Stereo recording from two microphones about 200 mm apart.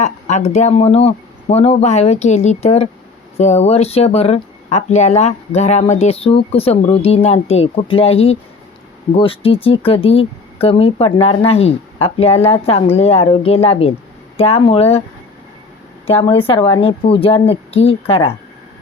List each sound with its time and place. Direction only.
0.0 s speech: 35° left (ahead or behind)
16.0 s speech: 25° left (ahead or behind)